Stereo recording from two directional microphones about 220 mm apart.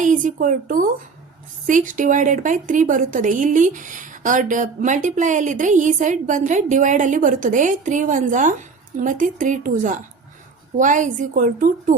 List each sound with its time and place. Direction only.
0.0 s speech: 35° right (ahead or behind)